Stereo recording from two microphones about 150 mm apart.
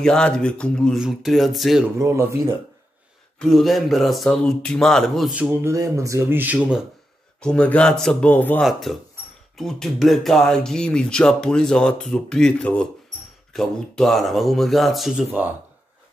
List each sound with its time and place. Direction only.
0.0 s speech: 5° left (ahead or behind)
2.0 s speech: 20° right (ahead or behind)
3.3 s speech: centre (ahead or behind)
5.7 s speech: 20° right (ahead or behind)
7.3 s speech: 5° left (ahead or behind)